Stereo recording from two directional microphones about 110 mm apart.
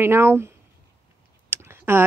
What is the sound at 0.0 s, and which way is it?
Speech, 20° right (ahead or behind).